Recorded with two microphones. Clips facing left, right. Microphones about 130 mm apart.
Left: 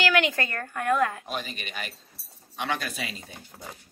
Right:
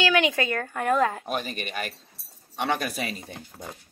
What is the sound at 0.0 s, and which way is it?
Speech, 15° right (ahead or behind).